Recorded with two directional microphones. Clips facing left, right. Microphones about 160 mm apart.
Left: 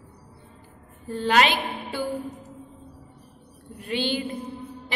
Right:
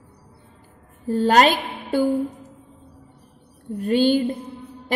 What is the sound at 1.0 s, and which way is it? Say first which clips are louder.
A woman's voice: right 5 dB; 40° right (ahead or behind).